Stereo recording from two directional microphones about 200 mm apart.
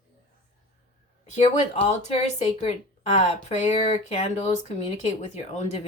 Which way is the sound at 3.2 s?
35° left (ahead or behind).